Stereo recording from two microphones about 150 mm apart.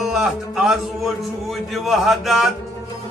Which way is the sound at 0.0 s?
5° right (ahead or behind).